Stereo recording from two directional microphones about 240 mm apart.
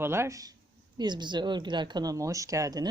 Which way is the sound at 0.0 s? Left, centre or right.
Centre.